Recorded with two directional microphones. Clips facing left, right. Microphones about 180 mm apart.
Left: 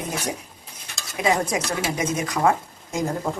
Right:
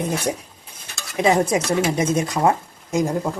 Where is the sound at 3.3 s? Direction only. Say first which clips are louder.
Right 2 dB; 5° right (ahead or behind).